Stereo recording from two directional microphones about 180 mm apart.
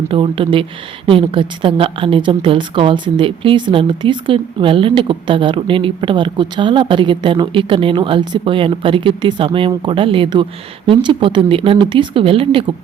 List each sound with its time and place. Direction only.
0.1 s a woman's voice: 30° right (ahead or behind)